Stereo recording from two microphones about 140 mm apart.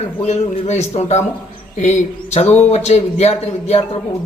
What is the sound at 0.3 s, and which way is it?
A man's voice, 55° left (ahead or behind).